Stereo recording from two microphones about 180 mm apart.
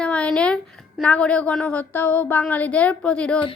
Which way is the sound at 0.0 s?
5° left (ahead or behind).